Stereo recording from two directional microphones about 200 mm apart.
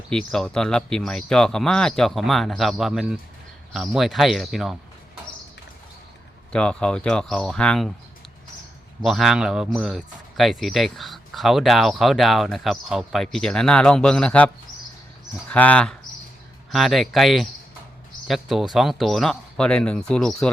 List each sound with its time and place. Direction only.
0.1 s a man's voice: 5° left (ahead or behind)
6.5 s a man's voice: 5° left (ahead or behind)
9.0 s a man's voice: centre (ahead or behind)